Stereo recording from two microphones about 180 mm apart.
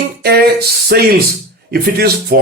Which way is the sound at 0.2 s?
60° right (ahead or behind).